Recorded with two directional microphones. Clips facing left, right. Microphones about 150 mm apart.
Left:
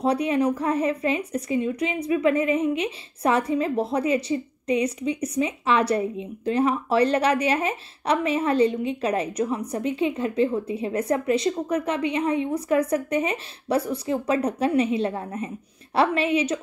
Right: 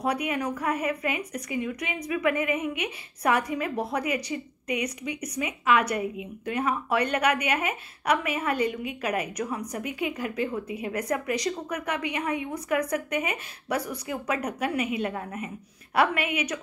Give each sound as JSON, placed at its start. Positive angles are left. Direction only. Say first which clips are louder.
{"t": 0.0, "sound": "a woman's voice", "louder": "left 6 dB", "side_deg": 30}